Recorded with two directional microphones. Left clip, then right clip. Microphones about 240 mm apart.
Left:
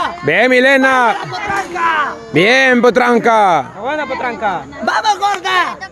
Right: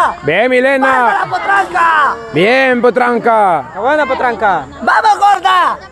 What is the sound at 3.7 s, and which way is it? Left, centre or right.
A man's voice, right.